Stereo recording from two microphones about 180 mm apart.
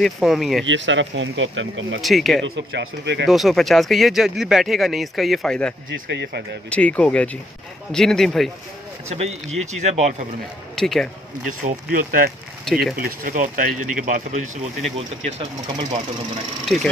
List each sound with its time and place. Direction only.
0.0 s speech: centre (ahead or behind)
0.7 s speech: 90° right
2.0 s speech: centre (ahead or behind)
2.7 s speech: 75° right (ahead or behind)
3.3 s speech: centre (ahead or behind)
6.0 s speech: 70° right (ahead or behind)
6.7 s speech: 5° left (ahead or behind)
9.1 s speech: 35° right (ahead or behind)
10.8 s speech: centre (ahead or behind)
11.6 s speech: 55° right (ahead or behind)
15.0 s speech: 30° right (ahead or behind)